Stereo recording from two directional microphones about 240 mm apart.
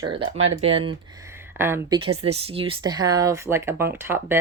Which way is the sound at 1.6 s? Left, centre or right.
Centre.